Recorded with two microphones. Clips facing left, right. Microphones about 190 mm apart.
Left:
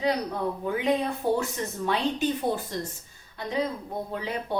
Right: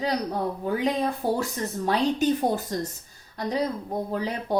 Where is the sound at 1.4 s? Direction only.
40° right (ahead or behind).